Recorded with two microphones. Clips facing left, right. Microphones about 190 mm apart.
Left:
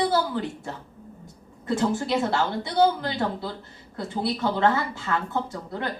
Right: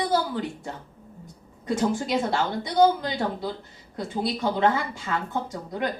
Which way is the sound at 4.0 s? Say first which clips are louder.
Even; 15° right (ahead or behind).